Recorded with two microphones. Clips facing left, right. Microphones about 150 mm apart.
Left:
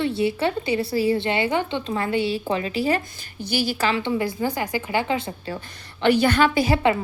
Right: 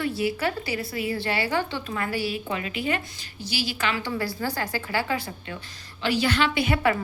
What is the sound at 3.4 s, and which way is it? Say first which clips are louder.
Speech: left 6 dB; 50° left (ahead or behind).